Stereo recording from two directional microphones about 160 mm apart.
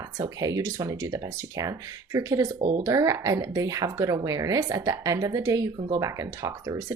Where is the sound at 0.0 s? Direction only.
20° right (ahead or behind).